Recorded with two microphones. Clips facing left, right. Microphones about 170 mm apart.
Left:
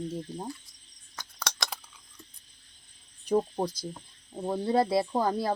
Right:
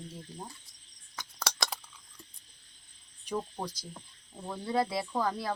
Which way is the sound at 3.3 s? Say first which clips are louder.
Left 9 dB; 30° left (ahead or behind).